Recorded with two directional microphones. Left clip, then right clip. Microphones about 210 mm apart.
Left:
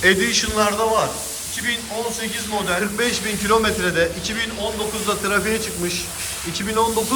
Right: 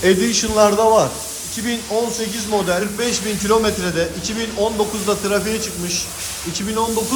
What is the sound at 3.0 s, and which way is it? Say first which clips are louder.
A man's voice: even; 15° right (ahead or behind).